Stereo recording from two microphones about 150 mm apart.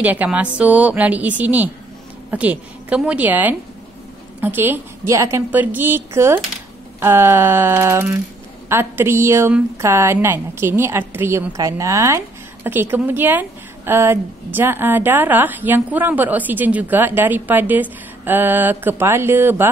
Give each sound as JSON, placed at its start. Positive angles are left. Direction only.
{"t": 0.0, "sound": "a woman's voice", "side_deg": -10}